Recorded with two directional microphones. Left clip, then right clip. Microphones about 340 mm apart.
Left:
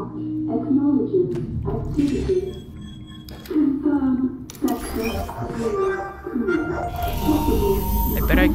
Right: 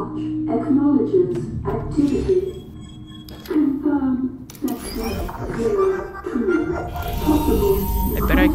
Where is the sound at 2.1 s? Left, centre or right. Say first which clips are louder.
Right 3 dB; centre.